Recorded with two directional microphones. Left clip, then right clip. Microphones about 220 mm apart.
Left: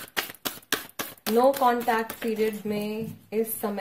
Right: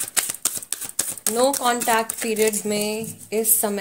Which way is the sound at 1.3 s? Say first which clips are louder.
Left 1 dB; 20° right (ahead or behind).